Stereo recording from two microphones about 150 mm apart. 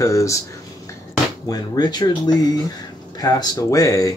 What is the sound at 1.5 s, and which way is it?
Speech, 30° left (ahead or behind).